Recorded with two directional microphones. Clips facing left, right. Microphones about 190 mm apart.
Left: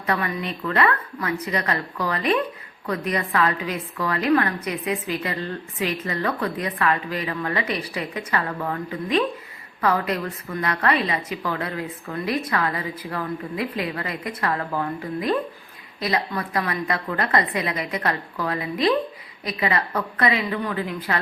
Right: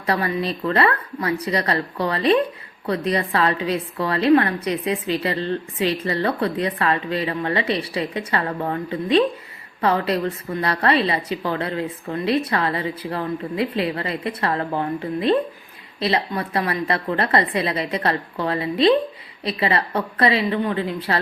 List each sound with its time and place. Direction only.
0.0 s a woman's voice: 35° right (ahead or behind)